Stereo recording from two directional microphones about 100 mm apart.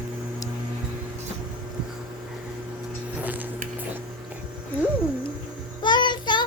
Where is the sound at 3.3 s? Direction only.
20° right (ahead or behind).